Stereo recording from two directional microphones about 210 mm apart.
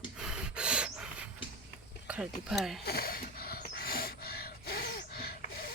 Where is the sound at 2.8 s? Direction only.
45° left (ahead or behind).